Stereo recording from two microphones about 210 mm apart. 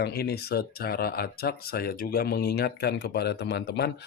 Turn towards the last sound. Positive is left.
turn(degrees=50)  # may be behind; listen again after turning